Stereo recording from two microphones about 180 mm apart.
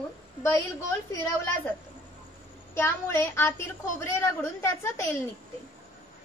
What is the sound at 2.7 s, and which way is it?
A woman's voice, 15° left (ahead or behind).